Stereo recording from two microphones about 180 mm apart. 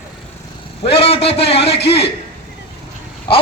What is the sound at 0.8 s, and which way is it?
Speech, 35° left (ahead or behind).